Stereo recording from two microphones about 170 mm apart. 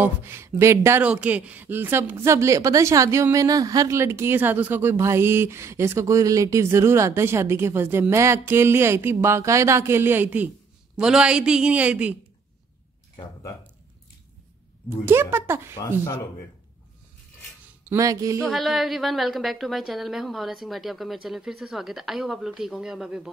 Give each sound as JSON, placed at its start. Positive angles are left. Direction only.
{"t": 0.0, "sound": "a woman's voice", "side_deg": -15}
{"t": 13.2, "sound": "speech", "side_deg": 20}
{"t": 15.0, "sound": "speech", "side_deg": -15}
{"t": 15.8, "sound": "speech", "side_deg": 20}
{"t": 17.8, "sound": "speech", "side_deg": -20}
{"t": 18.5, "sound": "a woman's voice", "side_deg": 0}